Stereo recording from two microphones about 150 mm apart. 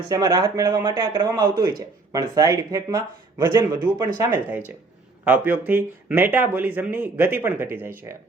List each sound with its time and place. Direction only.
0.1 s speech: 25° right (ahead or behind)